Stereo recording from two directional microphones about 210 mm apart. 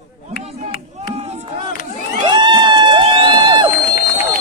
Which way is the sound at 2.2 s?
20° right (ahead or behind).